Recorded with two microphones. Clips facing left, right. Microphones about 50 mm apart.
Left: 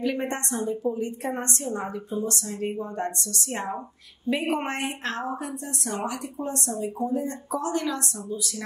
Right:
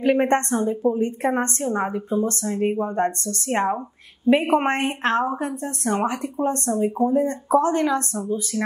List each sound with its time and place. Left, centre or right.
0.0 s a woman's voice: right